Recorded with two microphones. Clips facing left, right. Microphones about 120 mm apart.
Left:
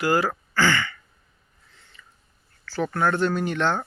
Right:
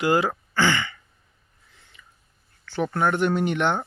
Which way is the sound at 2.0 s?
10° right (ahead or behind).